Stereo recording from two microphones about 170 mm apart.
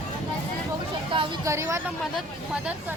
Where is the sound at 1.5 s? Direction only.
15° right (ahead or behind).